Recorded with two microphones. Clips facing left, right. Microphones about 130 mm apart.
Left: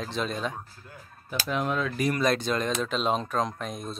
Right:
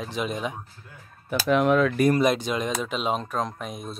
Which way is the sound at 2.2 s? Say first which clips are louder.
Right 2 dB; 15° right (ahead or behind).